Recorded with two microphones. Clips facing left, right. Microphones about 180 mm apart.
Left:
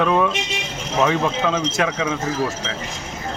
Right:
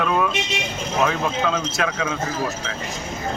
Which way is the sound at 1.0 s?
20° left (ahead or behind).